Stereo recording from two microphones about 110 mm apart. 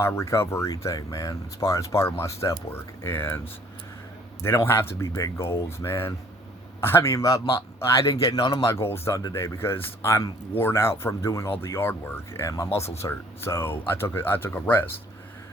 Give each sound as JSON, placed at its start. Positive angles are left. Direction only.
{"t": 0.0, "sound": "speech", "side_deg": 25}
{"t": 4.4, "sound": "a man's voice", "side_deg": 20}
{"t": 8.6, "sound": "speech", "side_deg": 25}